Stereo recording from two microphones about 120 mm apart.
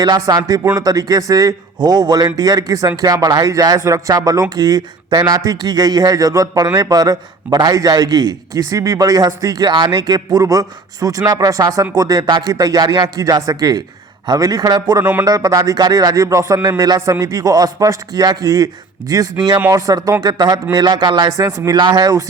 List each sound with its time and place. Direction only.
0.0 s speech: 35° right (ahead or behind)